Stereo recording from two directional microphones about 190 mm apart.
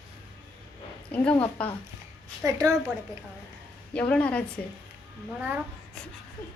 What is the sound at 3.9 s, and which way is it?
Speech, 5° left (ahead or behind).